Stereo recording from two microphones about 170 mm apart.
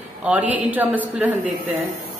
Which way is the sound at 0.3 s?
10° right (ahead or behind).